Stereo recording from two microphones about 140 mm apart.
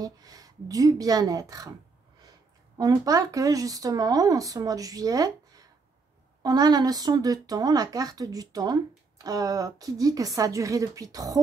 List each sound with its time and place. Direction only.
0.0 s speech: 25° right (ahead or behind)
2.8 s speech: 25° right (ahead or behind)